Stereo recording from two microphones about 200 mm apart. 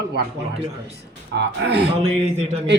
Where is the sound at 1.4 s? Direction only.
60° right (ahead or behind).